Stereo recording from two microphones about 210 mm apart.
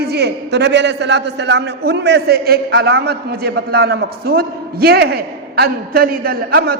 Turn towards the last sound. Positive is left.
turn(degrees=-45)  # may be behind; listen again after turning